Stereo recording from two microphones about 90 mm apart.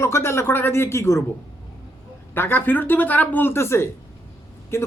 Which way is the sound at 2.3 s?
25° left (ahead or behind).